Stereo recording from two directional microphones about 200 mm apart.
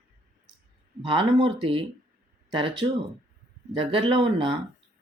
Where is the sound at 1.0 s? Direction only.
25° right (ahead or behind).